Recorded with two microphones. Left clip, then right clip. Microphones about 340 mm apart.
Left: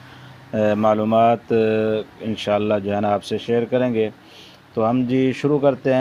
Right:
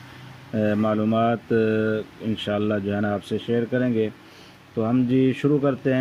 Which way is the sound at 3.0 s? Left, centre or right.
Left.